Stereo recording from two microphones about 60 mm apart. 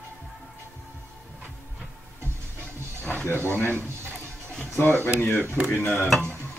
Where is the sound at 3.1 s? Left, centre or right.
Left.